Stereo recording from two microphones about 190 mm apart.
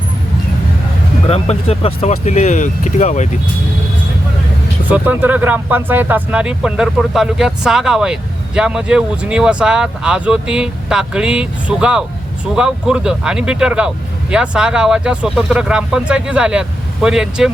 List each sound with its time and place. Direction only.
1.3 s speech: 30° left (ahead or behind)
4.9 s speech: 10° right (ahead or behind)